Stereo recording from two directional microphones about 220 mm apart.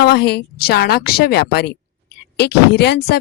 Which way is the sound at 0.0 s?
50° left (ahead or behind).